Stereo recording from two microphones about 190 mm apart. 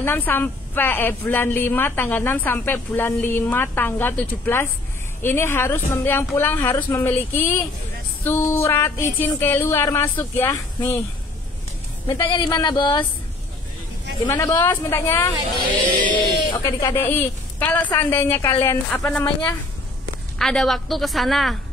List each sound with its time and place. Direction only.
0.0 s a woman's voice: 10° left (ahead or behind)
12.1 s speech: 20° left (ahead or behind)
14.2 s a woman's voice: 20° left (ahead or behind)
16.5 s a woman's voice: 20° left (ahead or behind)
20.3 s a woman's voice: centre (ahead or behind)